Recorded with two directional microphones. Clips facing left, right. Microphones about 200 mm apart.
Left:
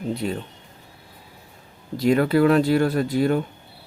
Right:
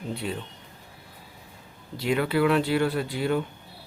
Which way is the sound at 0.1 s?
40° left (ahead or behind).